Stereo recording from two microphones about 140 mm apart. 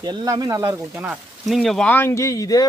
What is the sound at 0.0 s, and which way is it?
Speech, 30° right (ahead or behind).